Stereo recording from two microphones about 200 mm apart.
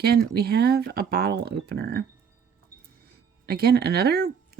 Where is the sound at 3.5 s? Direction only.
50° right (ahead or behind).